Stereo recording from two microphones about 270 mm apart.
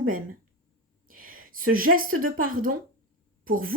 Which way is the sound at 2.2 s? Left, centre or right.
Right.